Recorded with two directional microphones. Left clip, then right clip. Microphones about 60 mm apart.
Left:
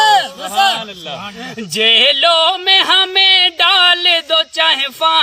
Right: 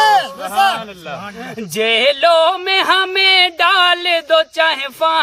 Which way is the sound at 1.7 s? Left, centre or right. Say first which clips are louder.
Left 3 dB; right.